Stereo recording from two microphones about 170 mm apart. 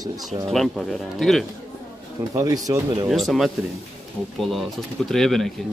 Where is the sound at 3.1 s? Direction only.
Centre (ahead or behind).